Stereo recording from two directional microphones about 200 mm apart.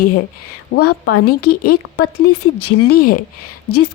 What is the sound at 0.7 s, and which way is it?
Speech, 70° left (ahead or behind).